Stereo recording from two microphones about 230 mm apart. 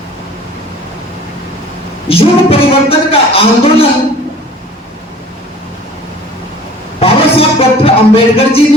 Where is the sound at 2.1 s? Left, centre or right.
Left.